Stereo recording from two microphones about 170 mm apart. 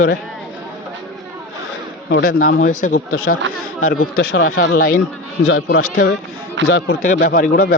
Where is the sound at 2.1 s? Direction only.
60° left (ahead or behind).